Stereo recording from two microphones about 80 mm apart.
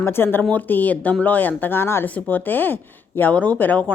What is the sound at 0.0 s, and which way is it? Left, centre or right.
Speech, left.